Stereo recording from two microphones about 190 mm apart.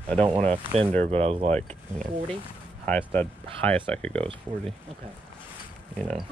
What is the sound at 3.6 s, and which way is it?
Speech, 10° left (ahead or behind).